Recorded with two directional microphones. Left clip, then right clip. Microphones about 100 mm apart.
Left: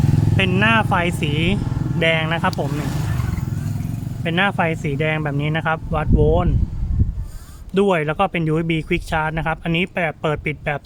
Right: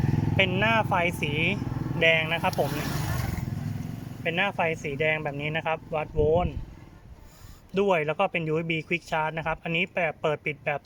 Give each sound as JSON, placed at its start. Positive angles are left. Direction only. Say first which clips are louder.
{"t": 0.5, "sound": "speech", "louder": "left 7 dB", "side_deg": 30}
{"t": 4.2, "sound": "speech", "louder": "left 7 dB", "side_deg": 35}
{"t": 7.7, "sound": "speech", "louder": "left 6 dB", "side_deg": 35}